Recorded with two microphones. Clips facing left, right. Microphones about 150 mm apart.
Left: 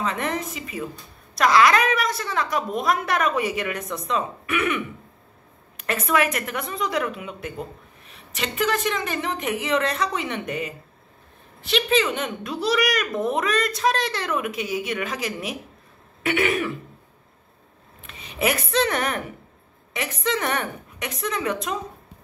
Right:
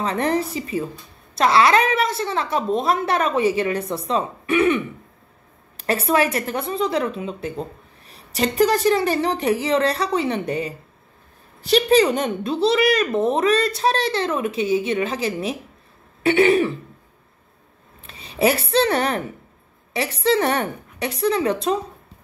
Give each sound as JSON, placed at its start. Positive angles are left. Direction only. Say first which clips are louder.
{"t": 0.0, "sound": "a woman's voice", "louder": "right 5 dB", "side_deg": -35}
{"t": 18.0, "sound": "speech", "louder": "right 5 dB", "side_deg": -30}